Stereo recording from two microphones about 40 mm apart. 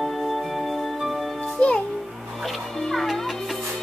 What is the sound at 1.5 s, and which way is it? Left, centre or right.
Music, left.